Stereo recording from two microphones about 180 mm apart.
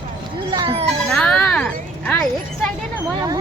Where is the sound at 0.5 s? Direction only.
30° right (ahead or behind).